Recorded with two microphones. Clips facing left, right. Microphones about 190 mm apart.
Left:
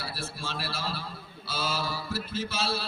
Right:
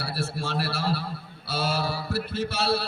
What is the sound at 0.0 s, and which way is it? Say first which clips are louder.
A man's voice: right 6 dB; 65° right (ahead or behind).